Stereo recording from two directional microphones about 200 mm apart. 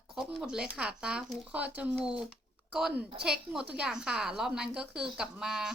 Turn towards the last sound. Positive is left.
turn(degrees=0)  # may be behind; listen again after turning